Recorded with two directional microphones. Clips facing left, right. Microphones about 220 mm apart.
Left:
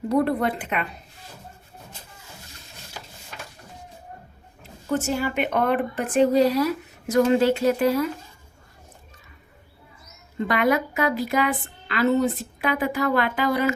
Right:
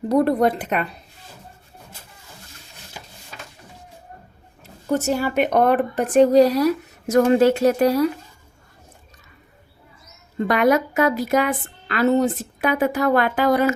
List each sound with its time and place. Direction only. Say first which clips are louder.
0.1 s a woman's voice: right 4 dB; 40° right (ahead or behind)
4.9 s a woman's voice: right 3 dB; 40° right (ahead or behind)
10.3 s a woman's voice: right 4 dB; 45° right (ahead or behind)